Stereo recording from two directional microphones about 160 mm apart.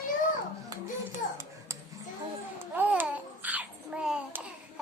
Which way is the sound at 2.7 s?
10° right (ahead or behind).